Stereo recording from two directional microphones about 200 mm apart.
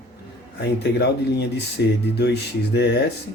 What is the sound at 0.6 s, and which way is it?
Speech, 55° left (ahead or behind).